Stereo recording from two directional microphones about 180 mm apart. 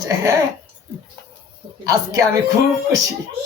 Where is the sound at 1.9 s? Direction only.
20° right (ahead or behind).